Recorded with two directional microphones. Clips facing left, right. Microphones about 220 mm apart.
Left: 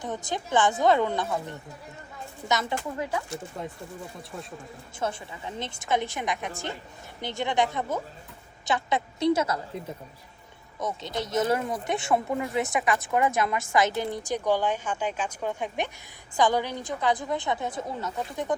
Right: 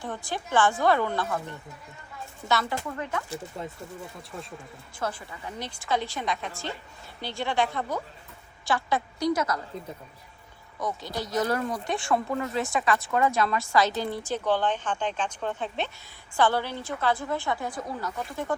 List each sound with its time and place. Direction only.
0.0 s speech: 20° left (ahead or behind)
4.9 s a woman's voice: 25° left (ahead or behind)
10.8 s a woman's voice: 20° left (ahead or behind)